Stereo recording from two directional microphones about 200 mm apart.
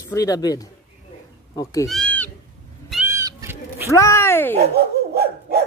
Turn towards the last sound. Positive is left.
turn(degrees=-50)  # may be behind; listen again after turning